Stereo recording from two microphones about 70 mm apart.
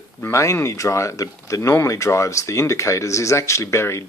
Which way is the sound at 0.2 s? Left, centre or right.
Left.